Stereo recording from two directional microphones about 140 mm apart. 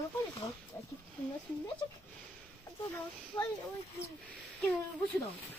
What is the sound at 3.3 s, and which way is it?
Speech, 35° left (ahead or behind).